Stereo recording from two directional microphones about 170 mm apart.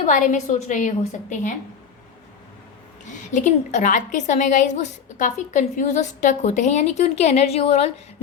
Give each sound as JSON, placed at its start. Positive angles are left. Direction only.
{"t": 0.0, "sound": "a woman's voice", "side_deg": 50}
{"t": 3.3, "sound": "a woman's voice", "side_deg": 45}